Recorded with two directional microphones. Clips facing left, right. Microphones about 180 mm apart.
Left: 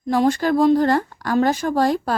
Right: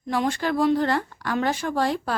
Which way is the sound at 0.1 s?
40° left (ahead or behind).